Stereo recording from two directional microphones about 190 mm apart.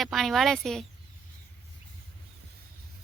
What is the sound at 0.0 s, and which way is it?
Speech, centre (ahead or behind).